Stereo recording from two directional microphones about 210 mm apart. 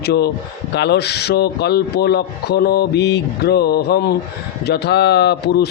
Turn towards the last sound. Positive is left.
turn(degrees=50)  # may be behind; listen again after turning